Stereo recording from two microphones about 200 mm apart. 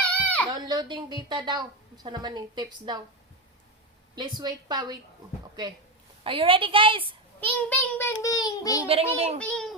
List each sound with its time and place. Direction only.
0.1 s a sound: 5° left (ahead or behind)
0.4 s speech: 20° right (ahead or behind)
4.1 s speech: 20° right (ahead or behind)
6.2 s speech: 25° right (ahead or behind)
7.4 s child singing: 10° left (ahead or behind)
9.1 s a child's voice: 30° right (ahead or behind)
9.4 s a sound: 5° left (ahead or behind)